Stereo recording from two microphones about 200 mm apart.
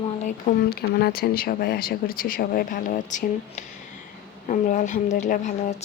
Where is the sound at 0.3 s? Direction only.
45° left (ahead or behind).